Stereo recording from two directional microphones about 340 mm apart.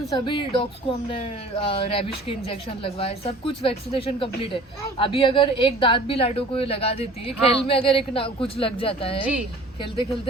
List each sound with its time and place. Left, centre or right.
0.3 s speech: centre